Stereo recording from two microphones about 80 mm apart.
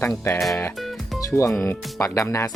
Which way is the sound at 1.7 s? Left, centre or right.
Left.